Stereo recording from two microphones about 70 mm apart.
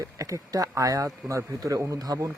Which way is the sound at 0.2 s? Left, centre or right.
Right.